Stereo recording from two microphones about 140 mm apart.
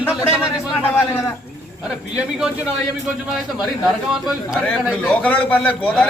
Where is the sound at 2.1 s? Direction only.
5° right (ahead or behind).